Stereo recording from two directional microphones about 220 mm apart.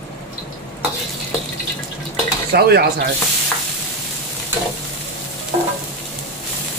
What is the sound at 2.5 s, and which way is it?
Speech, 45° right (ahead or behind).